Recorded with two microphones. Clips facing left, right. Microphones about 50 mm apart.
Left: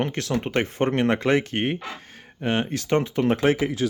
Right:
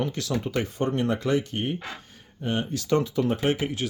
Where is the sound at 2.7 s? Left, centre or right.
Left.